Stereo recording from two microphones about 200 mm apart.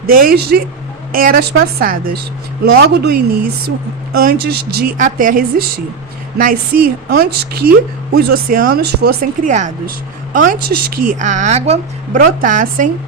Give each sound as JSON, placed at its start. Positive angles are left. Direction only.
{"t": 0.1, "sound": "a woman's voice", "side_deg": -45}